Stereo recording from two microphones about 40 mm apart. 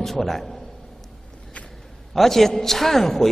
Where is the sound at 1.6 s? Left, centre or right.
Left.